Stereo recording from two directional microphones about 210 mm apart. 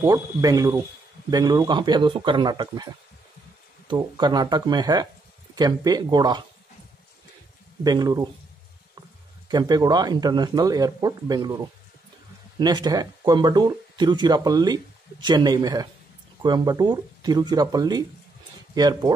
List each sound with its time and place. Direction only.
0.0 s speech: 15° right (ahead or behind)
7.8 s speech: 20° right (ahead or behind)
9.5 s speech: 20° right (ahead or behind)